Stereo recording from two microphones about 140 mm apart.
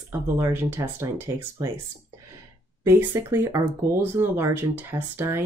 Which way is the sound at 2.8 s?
20° right (ahead or behind).